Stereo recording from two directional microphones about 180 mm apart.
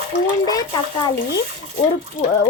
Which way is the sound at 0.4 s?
20° left (ahead or behind).